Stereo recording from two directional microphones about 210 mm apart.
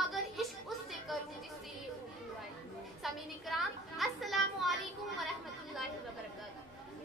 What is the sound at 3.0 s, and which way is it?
A woman's voice, centre (ahead or behind).